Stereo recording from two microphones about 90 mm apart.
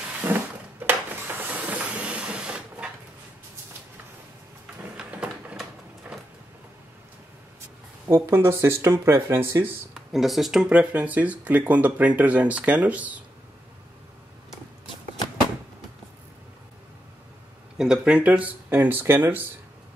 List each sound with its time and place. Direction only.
0.3 s a sound: 25° right (ahead or behind)
4.9 s a sound: 15° right (ahead or behind)
8.1 s speech: 25° right (ahead or behind)
9.9 s speech: centre (ahead or behind)
10.7 s speech: 15° right (ahead or behind)
17.7 s speech: 10° right (ahead or behind); by 19.4 s 25° right (ahead or behind)